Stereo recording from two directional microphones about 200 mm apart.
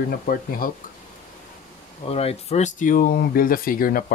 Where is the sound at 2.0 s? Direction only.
30° left (ahead or behind).